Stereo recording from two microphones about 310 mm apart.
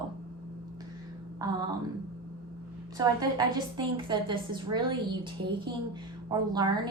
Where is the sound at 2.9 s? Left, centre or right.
Centre.